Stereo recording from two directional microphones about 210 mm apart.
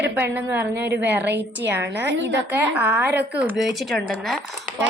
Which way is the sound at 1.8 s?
60° right (ahead or behind).